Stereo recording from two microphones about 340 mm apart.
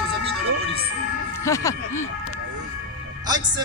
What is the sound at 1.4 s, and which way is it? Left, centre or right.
Speech, centre.